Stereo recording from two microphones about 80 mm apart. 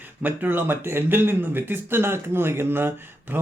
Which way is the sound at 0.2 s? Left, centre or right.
Right.